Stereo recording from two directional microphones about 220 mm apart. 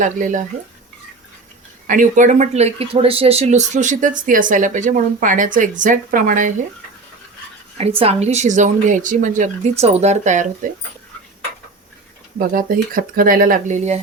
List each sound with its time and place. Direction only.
0.0 s speech: 35° right (ahead or behind)
1.9 s speech: 35° right (ahead or behind)
7.8 s speech: 30° right (ahead or behind)
12.4 s speech: 40° right (ahead or behind)